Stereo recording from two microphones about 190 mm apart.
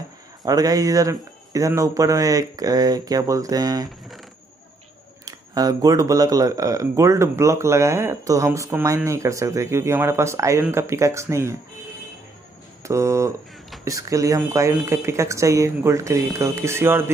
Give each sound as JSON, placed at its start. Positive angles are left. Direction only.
{"t": 0.5, "sound": "speech", "side_deg": -20}
{"t": 5.2, "sound": "speech", "side_deg": -20}
{"t": 12.8, "sound": "speech", "side_deg": -15}